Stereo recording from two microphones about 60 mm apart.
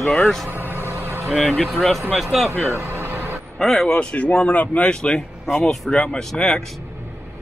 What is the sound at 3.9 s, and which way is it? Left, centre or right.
Speech, centre.